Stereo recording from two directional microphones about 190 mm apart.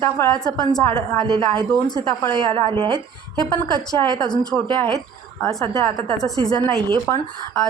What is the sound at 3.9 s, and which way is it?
Speech, 20° left (ahead or behind).